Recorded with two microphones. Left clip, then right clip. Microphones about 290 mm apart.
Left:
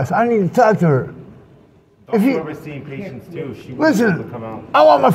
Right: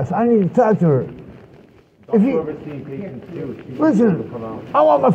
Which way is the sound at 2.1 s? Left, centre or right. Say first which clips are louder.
Even; left.